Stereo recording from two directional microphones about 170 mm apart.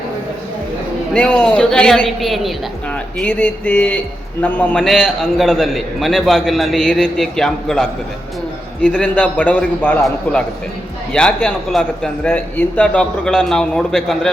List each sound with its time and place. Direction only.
1.1 s a man's voice: 5° left (ahead or behind)